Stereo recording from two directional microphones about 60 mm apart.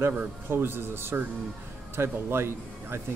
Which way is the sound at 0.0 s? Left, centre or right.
Right.